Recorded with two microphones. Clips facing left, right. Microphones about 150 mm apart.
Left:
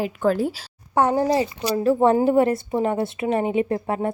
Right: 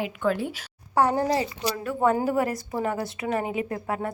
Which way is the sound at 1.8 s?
30° left (ahead or behind).